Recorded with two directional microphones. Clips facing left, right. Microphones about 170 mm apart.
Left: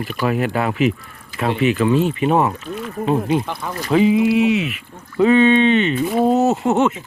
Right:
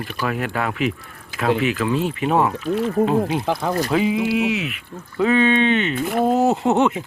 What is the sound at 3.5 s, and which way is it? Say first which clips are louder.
Speech: right 6 dB; 90° right.